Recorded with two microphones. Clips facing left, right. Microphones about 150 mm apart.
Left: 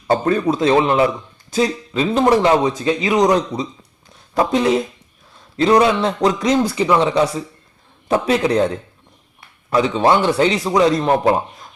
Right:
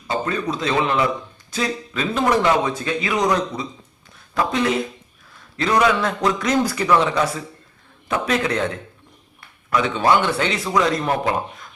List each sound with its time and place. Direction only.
0.1 s speech: 45° left (ahead or behind)
0.6 s speech: 35° left (ahead or behind)
2.8 s a man's voice: 25° left (ahead or behind)
3.2 s a man's voice: 35° left (ahead or behind)